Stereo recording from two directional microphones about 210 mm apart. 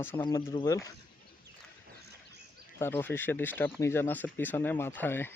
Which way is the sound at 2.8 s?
10° left (ahead or behind).